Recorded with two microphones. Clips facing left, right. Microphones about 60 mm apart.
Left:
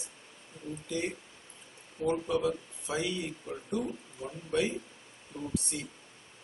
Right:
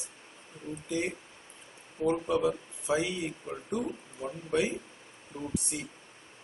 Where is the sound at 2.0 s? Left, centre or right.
Centre.